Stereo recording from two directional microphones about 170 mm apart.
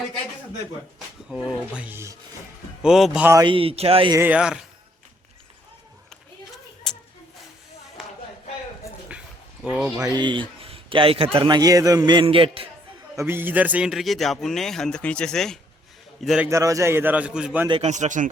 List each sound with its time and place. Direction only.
0.9 s speech: 5° right (ahead or behind)
2.8 s a man's voice: centre (ahead or behind)
3.4 s a man's voice: 30° right (ahead or behind)
4.2 s a man's voice: 5° right (ahead or behind)
6.9 s a sound: 5° left (ahead or behind)
9.6 s a man's voice: 5° right (ahead or behind)
10.0 s a man's voice: 25° right (ahead or behind)
13.1 s a man's voice: 15° right (ahead or behind)
16.5 s a man's voice: 20° right (ahead or behind)
17.7 s a man's voice: 35° right (ahead or behind)